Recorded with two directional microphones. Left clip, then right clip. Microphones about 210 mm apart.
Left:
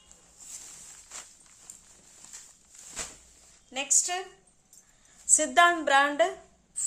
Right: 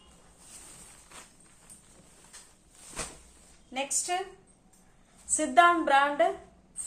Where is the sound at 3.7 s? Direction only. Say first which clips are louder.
Left 2 dB; 50° left (ahead or behind).